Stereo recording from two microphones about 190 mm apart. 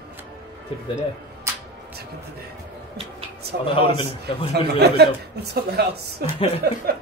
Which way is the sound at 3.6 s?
25° left (ahead or behind).